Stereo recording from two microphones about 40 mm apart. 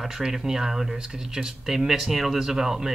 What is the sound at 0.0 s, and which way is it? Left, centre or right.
Speech, centre.